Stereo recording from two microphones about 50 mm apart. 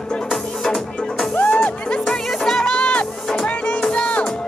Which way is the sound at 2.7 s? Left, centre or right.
Centre.